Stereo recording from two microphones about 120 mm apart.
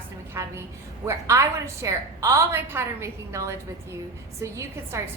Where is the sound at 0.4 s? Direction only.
25° right (ahead or behind).